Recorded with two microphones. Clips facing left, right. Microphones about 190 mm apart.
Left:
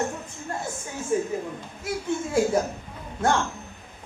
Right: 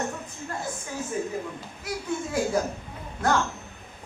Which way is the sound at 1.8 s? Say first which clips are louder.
Left 3 dB; 25° left (ahead or behind).